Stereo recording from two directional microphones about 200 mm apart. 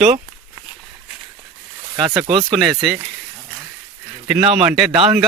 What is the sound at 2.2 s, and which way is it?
Speech, 25° right (ahead or behind).